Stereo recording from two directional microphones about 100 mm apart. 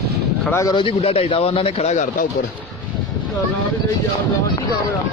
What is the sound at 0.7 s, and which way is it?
Speech, 55° left (ahead or behind).